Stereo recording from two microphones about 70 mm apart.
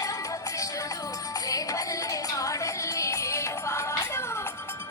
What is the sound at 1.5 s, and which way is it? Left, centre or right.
Music, left.